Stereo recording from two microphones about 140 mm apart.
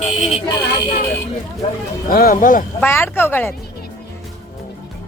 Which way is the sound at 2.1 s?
90° left.